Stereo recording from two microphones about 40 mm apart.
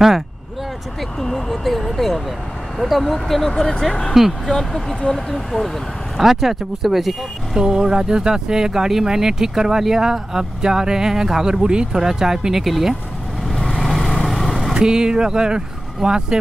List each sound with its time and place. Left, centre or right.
1.2 s speech: centre
4.1 s speech: centre
4.5 s speech: centre
7.5 s speech: centre
13.7 s vehicle: centre
14.6 s speech: centre